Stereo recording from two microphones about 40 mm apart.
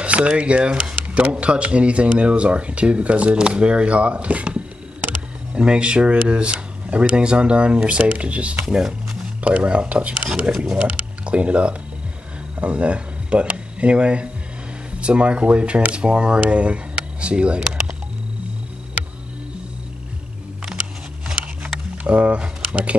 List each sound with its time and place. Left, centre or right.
0.0 s speech: right
8.6 s speech: centre
9.4 s speech: right
22.0 s speech: right